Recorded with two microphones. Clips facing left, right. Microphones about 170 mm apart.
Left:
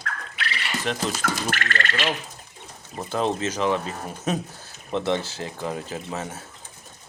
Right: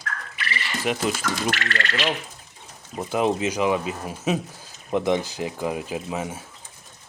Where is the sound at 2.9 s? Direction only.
10° right (ahead or behind).